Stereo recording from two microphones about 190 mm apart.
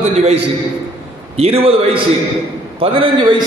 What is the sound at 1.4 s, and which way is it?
A man's voice, 30° right (ahead or behind).